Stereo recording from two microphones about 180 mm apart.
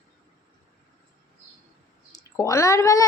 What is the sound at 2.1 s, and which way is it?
Speech, 15° left (ahead or behind).